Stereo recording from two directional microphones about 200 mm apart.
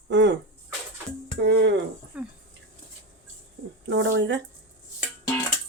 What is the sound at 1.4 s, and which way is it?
Speech, 60° right (ahead or behind).